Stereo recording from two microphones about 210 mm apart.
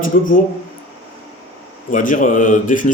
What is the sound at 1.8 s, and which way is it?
Speech, 40° left (ahead or behind).